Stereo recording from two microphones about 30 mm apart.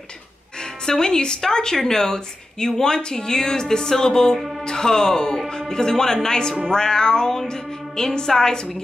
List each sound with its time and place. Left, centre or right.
0.8 s a woman's voice: left